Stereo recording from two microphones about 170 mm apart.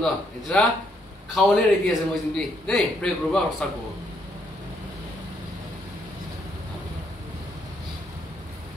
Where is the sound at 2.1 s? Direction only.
5° left (ahead or behind).